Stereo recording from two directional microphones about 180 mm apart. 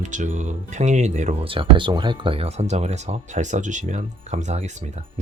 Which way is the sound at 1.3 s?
30° right (ahead or behind).